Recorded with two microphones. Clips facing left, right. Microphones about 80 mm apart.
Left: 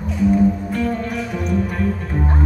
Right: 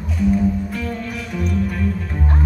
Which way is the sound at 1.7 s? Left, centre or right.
Left.